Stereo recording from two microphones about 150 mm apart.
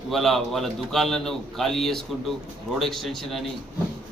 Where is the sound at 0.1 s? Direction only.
Centre (ahead or behind).